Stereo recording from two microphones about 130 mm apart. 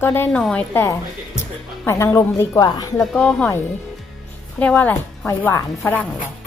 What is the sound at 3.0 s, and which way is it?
Speech, centre (ahead or behind).